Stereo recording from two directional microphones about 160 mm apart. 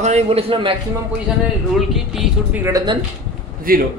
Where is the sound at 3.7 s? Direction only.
65° right (ahead or behind).